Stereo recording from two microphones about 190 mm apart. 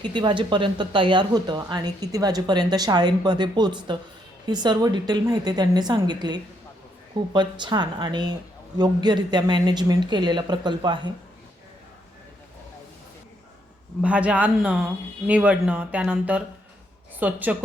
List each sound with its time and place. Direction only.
0.0 s speech: 25° right (ahead or behind)
14.0 s speech: 5° right (ahead or behind)